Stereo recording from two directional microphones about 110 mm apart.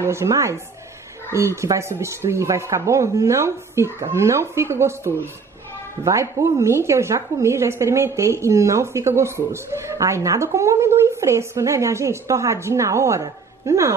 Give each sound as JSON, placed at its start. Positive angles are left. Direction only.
{"t": 0.0, "sound": "a woman's voice", "side_deg": -25}